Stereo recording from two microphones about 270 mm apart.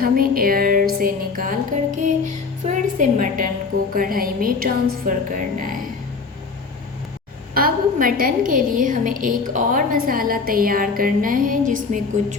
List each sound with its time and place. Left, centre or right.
0.0 s music: right
3.9 s a woman's voice: right
7.5 s a woman's voice: right